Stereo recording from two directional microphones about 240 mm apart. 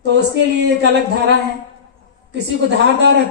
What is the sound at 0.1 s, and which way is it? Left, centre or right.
Speech, right.